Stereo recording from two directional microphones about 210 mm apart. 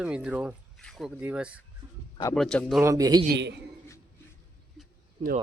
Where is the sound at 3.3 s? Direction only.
55° right (ahead or behind).